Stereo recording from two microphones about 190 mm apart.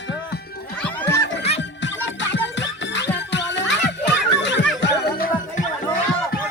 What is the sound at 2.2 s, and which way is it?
Music, 70° left (ahead or behind).